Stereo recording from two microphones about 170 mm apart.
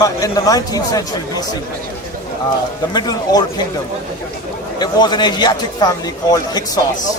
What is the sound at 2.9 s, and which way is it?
Speech, 25° left (ahead or behind).